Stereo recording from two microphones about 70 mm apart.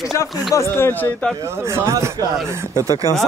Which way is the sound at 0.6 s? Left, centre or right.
Left.